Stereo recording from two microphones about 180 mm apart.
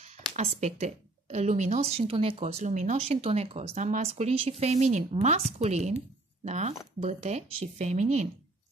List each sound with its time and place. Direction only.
0.0 s speech: 35° right (ahead or behind)